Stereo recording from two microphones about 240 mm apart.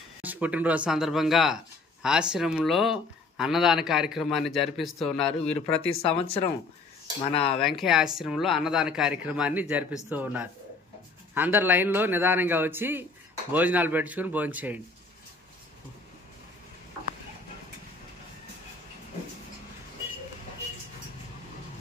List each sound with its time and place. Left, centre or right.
0.2 s speech: centre
5.7 s speech: left
7.6 s a man's voice: centre